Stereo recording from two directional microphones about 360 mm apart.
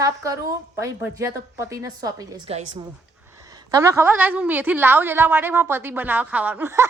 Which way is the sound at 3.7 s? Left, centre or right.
Centre.